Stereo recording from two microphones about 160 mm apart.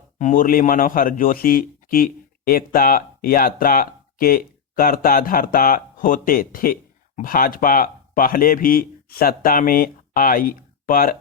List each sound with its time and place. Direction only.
0.2 s speech: 55° left (ahead or behind)